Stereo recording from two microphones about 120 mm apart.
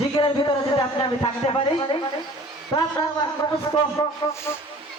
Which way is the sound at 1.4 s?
60° left (ahead or behind).